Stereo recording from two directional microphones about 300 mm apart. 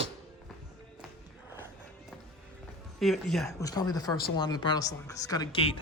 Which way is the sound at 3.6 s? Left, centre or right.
Centre.